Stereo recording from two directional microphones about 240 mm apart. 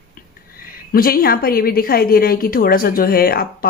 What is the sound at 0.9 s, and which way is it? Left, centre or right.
Speech, left.